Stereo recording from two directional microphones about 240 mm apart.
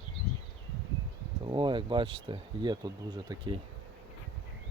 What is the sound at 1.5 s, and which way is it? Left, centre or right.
Speech, centre.